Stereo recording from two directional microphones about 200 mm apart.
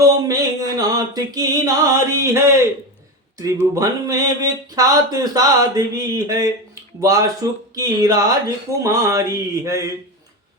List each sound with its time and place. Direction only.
0.0 s music: 15° right (ahead or behind)
3.8 s speech: 15° right (ahead or behind)